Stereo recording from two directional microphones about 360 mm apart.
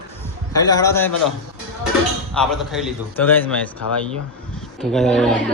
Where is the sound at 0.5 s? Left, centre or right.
Centre.